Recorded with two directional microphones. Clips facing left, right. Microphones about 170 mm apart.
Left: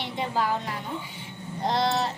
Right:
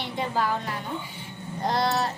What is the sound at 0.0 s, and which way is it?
Music, 20° left (ahead or behind).